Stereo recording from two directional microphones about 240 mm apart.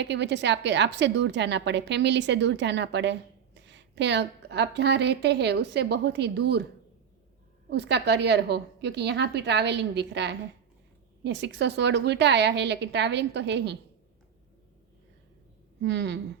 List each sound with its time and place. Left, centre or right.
0.0 s a woman's voice: right
7.7 s a woman's voice: right
15.8 s a woman's voice: right